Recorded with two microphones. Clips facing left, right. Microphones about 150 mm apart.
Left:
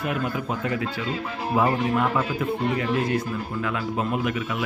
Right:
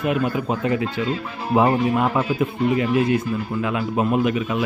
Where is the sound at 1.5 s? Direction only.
25° right (ahead or behind).